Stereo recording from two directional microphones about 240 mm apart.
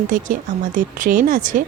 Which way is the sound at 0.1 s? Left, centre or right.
Right.